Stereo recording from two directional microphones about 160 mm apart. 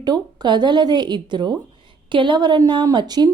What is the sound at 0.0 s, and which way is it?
A woman's voice, 25° right (ahead or behind).